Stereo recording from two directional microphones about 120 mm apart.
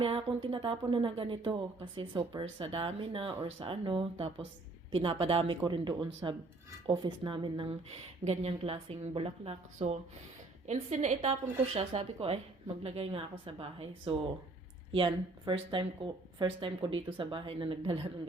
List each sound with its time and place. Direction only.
0.0 s a woman's voice: 50° right (ahead or behind)
5.6 s a woman's voice: 40° right (ahead or behind)
8.2 s a woman's voice: 65° right (ahead or behind)
10.7 s a woman's voice: 75° right (ahead or behind)
11.3 s a woman's voice: 55° right (ahead or behind)